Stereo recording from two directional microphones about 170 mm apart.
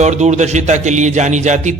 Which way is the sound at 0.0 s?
45° right (ahead or behind).